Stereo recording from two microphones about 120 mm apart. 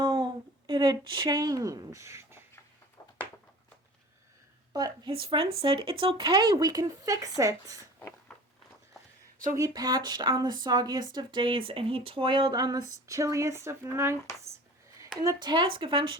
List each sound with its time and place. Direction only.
0.0 s a sound: 45° right (ahead or behind)
0.7 s speech: 40° right (ahead or behind); by 2.4 s 25° right (ahead or behind)
5.0 s speech: 50° right (ahead or behind); by 7.8 s 30° right (ahead or behind)
9.6 s speech: 30° right (ahead or behind)
15.4 s speech: 40° right (ahead or behind)